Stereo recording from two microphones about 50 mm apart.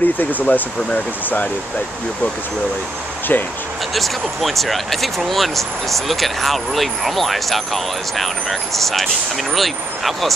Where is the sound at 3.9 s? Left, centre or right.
Centre.